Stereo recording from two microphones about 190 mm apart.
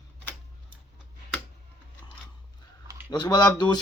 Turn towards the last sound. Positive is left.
turn(degrees=25)  # may be behind; listen again after turning